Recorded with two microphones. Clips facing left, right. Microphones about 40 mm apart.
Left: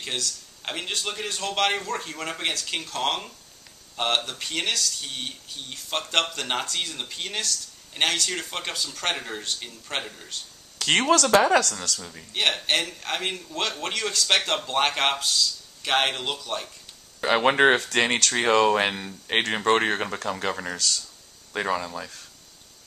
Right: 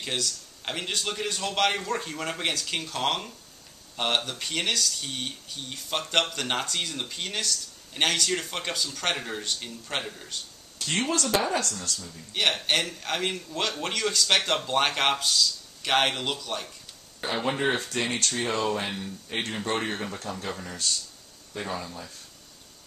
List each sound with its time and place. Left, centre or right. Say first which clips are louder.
0.0 s speech: even; centre
10.8 s speech: left 7 dB; left
12.3 s speech: left 1 dB; centre
17.2 s speech: left 8 dB; left